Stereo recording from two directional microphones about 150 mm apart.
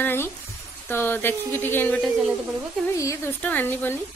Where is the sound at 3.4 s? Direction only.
10° left (ahead or behind).